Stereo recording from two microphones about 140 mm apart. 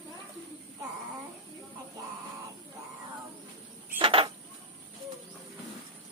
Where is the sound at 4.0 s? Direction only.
40° right (ahead or behind).